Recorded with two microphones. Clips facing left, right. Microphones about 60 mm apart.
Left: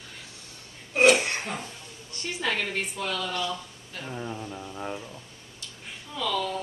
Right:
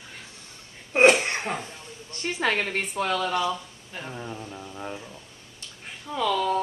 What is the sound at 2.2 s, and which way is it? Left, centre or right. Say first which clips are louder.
A woman's voice: right 4 dB; right.